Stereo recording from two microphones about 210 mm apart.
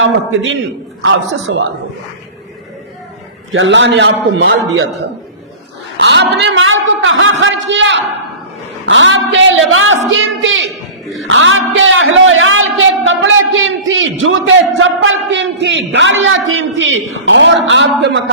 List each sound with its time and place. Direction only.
0.0 s a man's voice: 65° right (ahead or behind)
3.5 s a man's voice: 65° right (ahead or behind)
6.0 s a man's voice: 55° right (ahead or behind)